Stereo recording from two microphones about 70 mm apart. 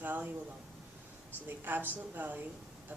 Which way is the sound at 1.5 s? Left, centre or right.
Right.